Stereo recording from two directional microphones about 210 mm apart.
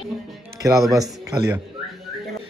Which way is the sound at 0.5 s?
15° right (ahead or behind).